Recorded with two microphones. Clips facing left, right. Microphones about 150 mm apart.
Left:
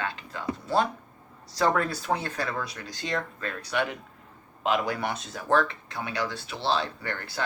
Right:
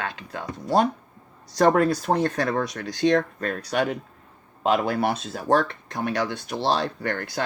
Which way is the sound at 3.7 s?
40° right (ahead or behind).